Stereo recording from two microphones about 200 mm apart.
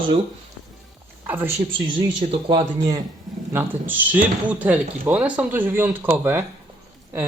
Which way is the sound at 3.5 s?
10° right (ahead or behind).